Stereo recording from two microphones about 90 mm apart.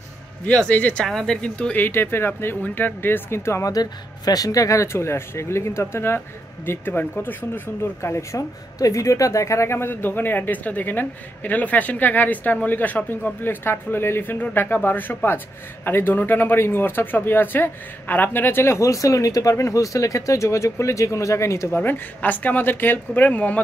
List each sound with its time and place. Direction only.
0.5 s speech: 15° left (ahead or behind)
1.9 s speech: 25° left (ahead or behind)
3.7 s speech: 45° left (ahead or behind); by 23.6 s 15° left (ahead or behind)